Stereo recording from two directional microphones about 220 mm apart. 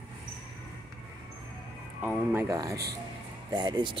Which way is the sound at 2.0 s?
10° right (ahead or behind).